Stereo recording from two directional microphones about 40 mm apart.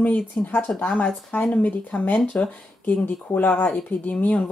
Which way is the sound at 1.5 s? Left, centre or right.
Left.